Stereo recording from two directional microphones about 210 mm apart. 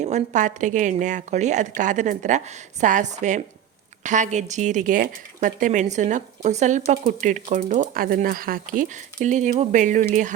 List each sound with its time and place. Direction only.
0.0 s a woman's voice: 35° right (ahead or behind)